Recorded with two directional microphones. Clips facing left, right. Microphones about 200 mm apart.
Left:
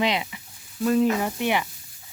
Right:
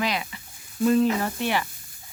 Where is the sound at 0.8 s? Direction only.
5° left (ahead or behind).